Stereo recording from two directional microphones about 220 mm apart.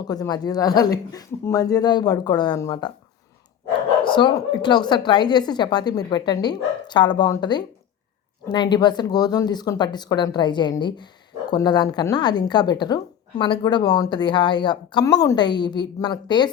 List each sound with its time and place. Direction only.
0.0 s speech: 15° left (ahead or behind)
4.0 s a woman's voice: 20° left (ahead or behind)